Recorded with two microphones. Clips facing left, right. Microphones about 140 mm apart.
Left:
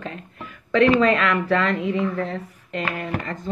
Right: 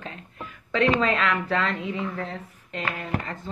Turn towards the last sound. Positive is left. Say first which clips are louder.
# left 3 dB
turn(degrees=50)  # may be behind; listen again after turning